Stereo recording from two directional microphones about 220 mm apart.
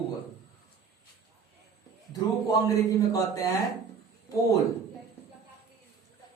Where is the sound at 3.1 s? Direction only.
15° left (ahead or behind).